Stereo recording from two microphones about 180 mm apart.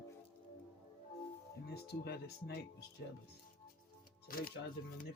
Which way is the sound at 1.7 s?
65° left (ahead or behind).